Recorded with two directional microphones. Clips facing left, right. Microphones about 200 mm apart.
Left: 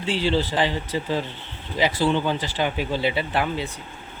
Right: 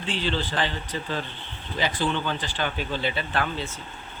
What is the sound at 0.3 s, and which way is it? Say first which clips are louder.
Speech: left 6 dB; 10° left (ahead or behind).